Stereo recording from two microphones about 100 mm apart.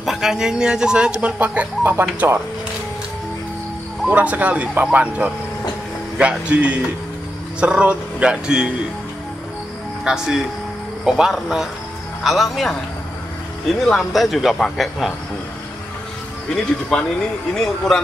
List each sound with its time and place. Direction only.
0.0 s speech: 5° right (ahead or behind); by 2.4 s 25° right (ahead or behind)
4.1 s speech: 15° right (ahead or behind)
10.0 s speech: 5° right (ahead or behind)
13.7 s speech: centre (ahead or behind)
16.9 s speech: 5° left (ahead or behind)